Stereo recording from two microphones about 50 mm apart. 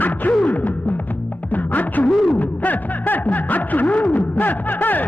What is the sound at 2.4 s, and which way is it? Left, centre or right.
Snicker, left.